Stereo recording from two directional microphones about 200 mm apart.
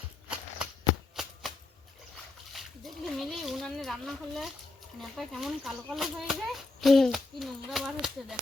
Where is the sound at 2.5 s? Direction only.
Centre (ahead or behind).